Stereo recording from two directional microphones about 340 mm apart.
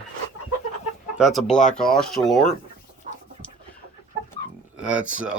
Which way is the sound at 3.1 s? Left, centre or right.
Right.